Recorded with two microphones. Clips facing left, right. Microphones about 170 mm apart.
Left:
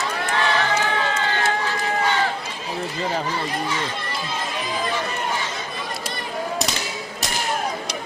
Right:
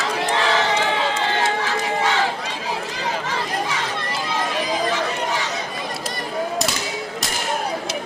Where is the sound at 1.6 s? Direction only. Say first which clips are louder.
Right 1 dB; 90° right.